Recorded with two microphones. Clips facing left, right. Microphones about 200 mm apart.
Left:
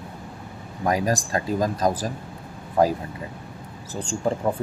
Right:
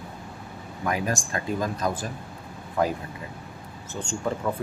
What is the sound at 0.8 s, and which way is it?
Speech, 35° left (ahead or behind).